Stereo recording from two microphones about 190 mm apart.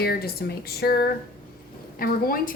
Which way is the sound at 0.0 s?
55° left (ahead or behind).